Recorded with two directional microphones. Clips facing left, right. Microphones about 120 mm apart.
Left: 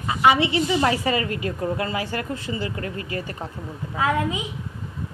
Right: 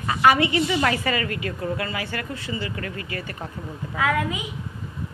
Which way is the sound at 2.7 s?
25° left (ahead or behind).